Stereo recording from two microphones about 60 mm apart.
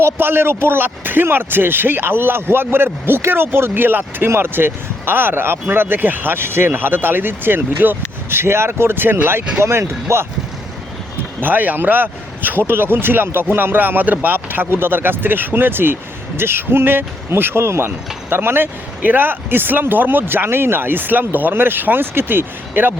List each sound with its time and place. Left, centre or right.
0.0 s speech: right
11.3 s speech: right